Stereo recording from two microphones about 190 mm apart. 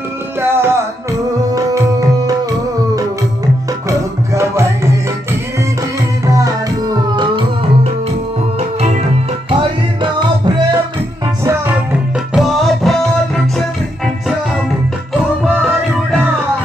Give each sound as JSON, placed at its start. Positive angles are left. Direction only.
{"t": 0.4, "sound": "music", "side_deg": -10}
{"t": 4.3, "sound": "music", "side_deg": -15}
{"t": 6.2, "sound": "music", "side_deg": -20}
{"t": 12.4, "sound": "music", "side_deg": 0}